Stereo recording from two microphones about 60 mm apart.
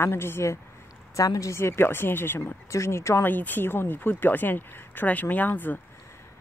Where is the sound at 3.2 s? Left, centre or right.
Left.